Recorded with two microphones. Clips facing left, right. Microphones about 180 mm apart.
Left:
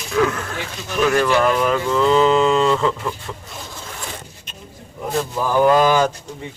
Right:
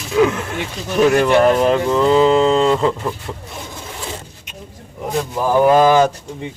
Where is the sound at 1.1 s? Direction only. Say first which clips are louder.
Right 4 dB; 25° right (ahead or behind).